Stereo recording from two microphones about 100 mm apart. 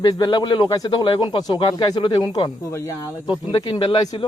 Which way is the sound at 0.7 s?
40° left (ahead or behind).